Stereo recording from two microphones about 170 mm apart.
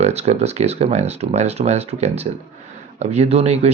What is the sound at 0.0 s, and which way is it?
Speech, 40° right (ahead or behind).